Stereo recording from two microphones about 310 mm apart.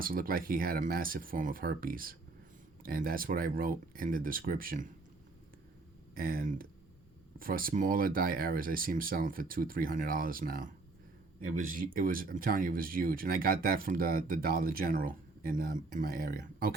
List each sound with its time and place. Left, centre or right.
0.0 s speech: right
6.1 s speech: right